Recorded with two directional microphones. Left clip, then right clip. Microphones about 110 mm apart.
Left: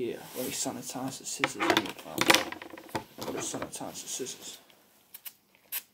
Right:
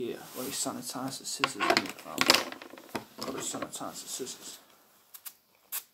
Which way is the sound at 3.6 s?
20° left (ahead or behind).